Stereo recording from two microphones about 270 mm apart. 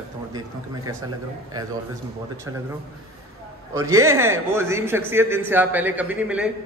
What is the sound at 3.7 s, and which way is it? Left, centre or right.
A man's voice, centre.